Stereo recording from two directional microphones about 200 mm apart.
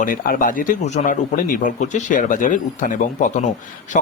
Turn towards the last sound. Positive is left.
turn(degrees=40)  # may be behind; listen again after turning